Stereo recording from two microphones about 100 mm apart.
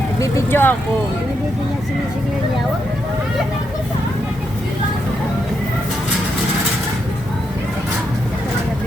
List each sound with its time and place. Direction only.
0.2 s speech: 25° left (ahead or behind)